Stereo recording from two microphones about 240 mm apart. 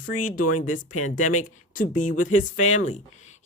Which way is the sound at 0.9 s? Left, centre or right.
Left.